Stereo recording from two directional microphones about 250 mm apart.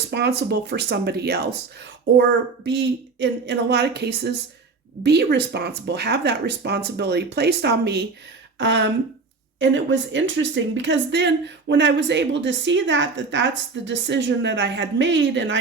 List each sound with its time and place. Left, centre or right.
0.1 s speech: right
2.6 s a woman's voice: right